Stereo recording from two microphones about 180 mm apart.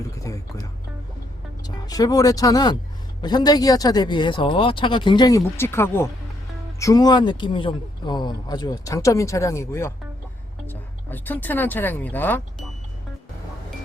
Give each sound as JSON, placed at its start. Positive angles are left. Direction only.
{"t": 1.6, "sound": "speech", "side_deg": 20}